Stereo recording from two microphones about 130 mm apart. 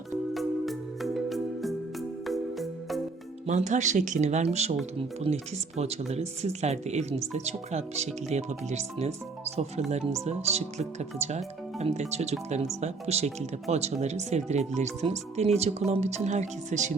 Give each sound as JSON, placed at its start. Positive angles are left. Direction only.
{"t": 0.3, "sound": "music", "side_deg": 0}
{"t": 3.4, "sound": "speech", "side_deg": -70}